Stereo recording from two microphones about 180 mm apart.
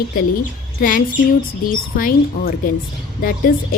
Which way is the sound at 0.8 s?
50° left (ahead or behind).